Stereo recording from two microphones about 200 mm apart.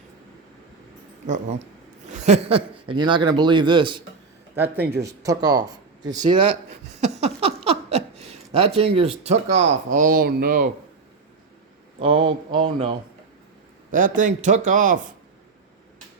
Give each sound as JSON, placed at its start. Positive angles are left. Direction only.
{"t": 1.3, "sound": "a man's voice", "side_deg": -35}
{"t": 11.9, "sound": "speech", "side_deg": -25}
{"t": 13.9, "sound": "a man's voice", "side_deg": -40}